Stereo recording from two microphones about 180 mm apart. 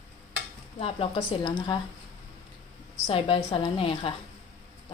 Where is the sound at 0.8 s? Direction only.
35° left (ahead or behind).